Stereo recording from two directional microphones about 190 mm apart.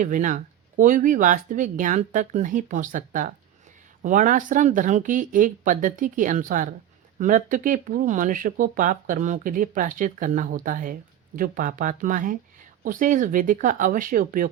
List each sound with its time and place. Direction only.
0.0 s speech: 45° right (ahead or behind)